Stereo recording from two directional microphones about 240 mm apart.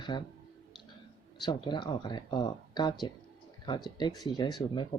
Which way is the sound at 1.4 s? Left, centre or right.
Centre.